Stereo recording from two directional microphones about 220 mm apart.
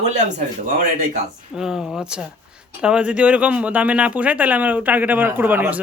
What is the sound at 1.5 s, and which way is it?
Speech, centre (ahead or behind).